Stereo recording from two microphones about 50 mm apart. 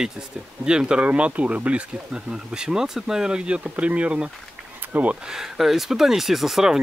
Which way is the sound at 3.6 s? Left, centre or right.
Right.